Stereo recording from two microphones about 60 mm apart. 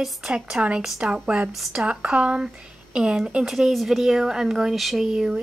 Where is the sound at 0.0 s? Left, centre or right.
Centre.